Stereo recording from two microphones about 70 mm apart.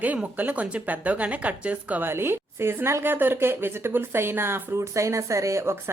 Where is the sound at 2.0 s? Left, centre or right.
Right.